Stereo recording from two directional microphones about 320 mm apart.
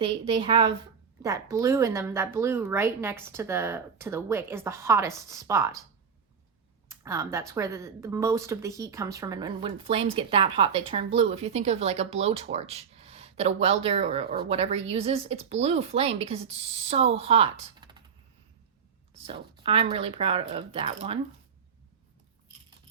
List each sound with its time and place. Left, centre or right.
0.0 s speech: centre
6.8 s a woman's voice: centre
19.3 s speech: centre